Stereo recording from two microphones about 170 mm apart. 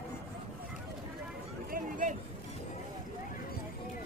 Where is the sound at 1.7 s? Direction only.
50° right (ahead or behind).